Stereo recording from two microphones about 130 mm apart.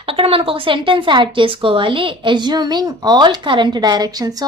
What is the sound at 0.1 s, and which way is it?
Speech, 45° right (ahead or behind).